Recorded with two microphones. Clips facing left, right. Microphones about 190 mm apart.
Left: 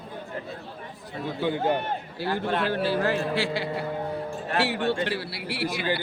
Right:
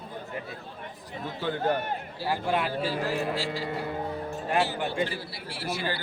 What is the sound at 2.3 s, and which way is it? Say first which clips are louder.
Speech: even; 10° right (ahead or behind).